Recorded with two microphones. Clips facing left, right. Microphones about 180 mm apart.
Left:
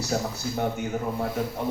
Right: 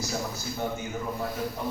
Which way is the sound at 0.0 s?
70° left (ahead or behind).